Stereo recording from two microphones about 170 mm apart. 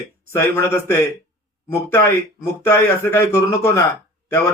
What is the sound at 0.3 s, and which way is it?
Speech, 15° left (ahead or behind).